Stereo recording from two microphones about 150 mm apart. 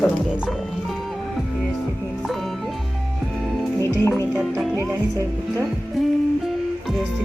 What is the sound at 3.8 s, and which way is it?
Music, 20° left (ahead or behind).